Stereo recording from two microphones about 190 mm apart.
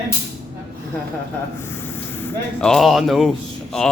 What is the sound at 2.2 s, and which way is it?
Speech, 5° left (ahead or behind).